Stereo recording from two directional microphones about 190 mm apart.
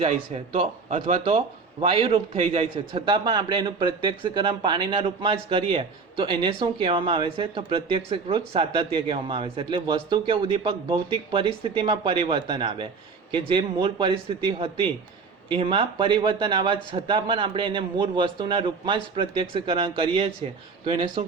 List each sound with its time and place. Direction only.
0.0 s a man's voice: 30° right (ahead or behind)